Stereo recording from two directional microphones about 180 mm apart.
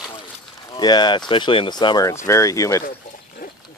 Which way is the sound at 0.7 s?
25° left (ahead or behind).